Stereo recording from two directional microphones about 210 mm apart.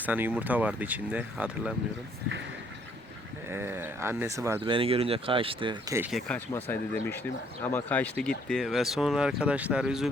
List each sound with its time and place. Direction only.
0.0 s speech: 10° right (ahead or behind)
3.5 s speech: 10° right (ahead or behind)
4.6 s speech: 25° right (ahead or behind)
6.1 s speech: centre (ahead or behind)